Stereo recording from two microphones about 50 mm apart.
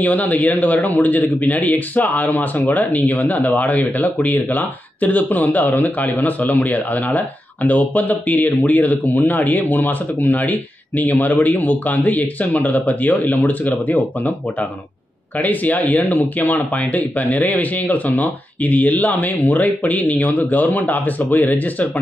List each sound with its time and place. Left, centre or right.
0.0 s speech: left
15.4 s speech: left